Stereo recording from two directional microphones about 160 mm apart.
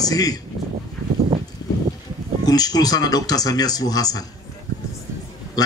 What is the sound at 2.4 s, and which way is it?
Speech, 25° left (ahead or behind).